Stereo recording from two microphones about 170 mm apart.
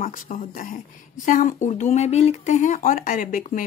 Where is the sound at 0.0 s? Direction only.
50° left (ahead or behind).